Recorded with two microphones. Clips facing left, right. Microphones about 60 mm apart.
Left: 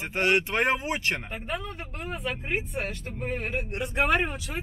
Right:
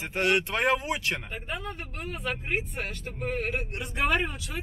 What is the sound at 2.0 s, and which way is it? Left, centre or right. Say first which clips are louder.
Speech: left 1 dB; left.